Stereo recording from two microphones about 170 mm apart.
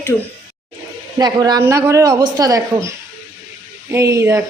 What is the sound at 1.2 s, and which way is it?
A woman's voice, 25° right (ahead or behind).